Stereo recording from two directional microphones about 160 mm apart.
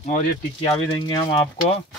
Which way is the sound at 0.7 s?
35° left (ahead or behind).